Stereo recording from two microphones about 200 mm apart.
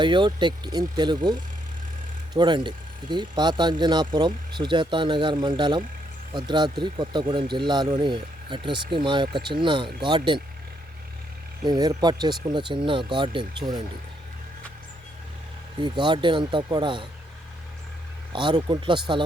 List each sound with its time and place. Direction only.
0.0 s speech: 25° right (ahead or behind)
11.6 s speech: 20° right (ahead or behind)
15.8 s speech: 20° right (ahead or behind)
18.3 s speech: 25° right (ahead or behind)